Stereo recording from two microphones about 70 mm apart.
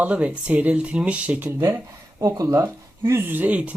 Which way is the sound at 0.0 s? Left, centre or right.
Centre.